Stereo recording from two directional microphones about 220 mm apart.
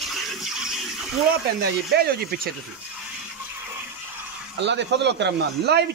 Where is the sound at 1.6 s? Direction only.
45° right (ahead or behind).